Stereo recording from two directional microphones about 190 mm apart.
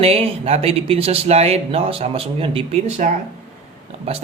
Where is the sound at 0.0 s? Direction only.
30° right (ahead or behind).